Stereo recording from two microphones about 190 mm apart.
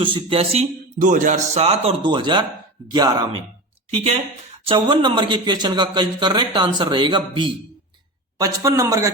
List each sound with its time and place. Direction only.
0.0 s a man's voice: 25° right (ahead or behind)
4.7 s a man's voice: 25° right (ahead or behind)